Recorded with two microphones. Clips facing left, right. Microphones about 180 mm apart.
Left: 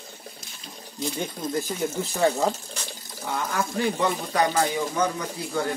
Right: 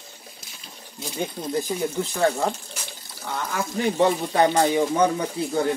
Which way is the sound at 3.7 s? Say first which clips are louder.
Right 6 dB; 25° right (ahead or behind).